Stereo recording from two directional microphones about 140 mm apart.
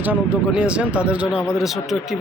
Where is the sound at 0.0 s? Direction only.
10° right (ahead or behind).